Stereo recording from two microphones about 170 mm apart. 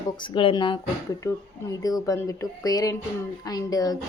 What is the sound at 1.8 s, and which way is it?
Speech, 20° left (ahead or behind).